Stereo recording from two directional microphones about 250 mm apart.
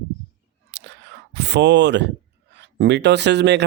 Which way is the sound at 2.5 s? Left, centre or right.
Right.